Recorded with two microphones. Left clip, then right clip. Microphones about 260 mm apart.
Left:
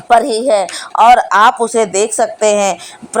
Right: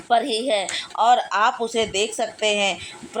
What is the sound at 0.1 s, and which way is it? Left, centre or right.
A woman's voice, left.